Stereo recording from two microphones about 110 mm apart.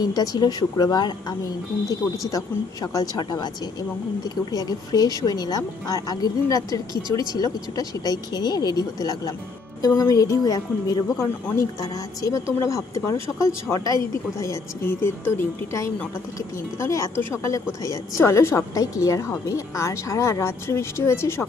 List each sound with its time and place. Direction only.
0.0 s speech: 35° left (ahead or behind)
4.5 s a woman's voice: 35° left (ahead or behind)